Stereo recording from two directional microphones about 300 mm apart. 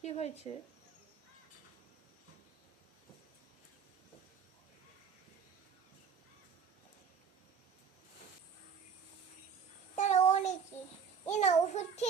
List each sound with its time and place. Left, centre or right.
0.0 s a sound: left
9.9 s child singing: left
11.3 s a child's voice: left